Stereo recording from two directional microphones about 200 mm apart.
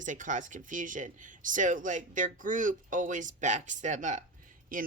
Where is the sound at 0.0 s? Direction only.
40° right (ahead or behind).